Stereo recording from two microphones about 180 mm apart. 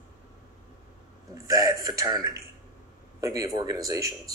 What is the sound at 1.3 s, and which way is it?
A man's voice, 20° right (ahead or behind).